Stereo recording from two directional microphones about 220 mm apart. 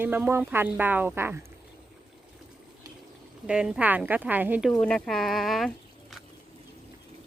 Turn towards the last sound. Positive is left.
turn(degrees=0)  # may be behind; listen again after turning